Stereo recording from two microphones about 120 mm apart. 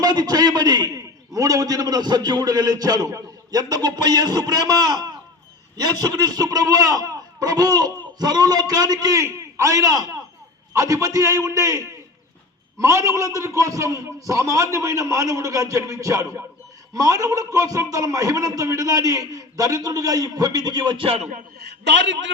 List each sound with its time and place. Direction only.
0.0 s a man's voice: 35° right (ahead or behind); by 21.2 s 50° right (ahead or behind)